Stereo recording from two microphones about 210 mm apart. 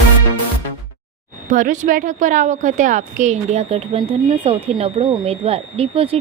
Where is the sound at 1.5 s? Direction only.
35° right (ahead or behind).